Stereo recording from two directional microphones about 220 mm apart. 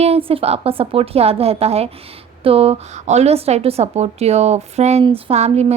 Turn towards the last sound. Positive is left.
turn(degrees=-30)  # may be behind; listen again after turning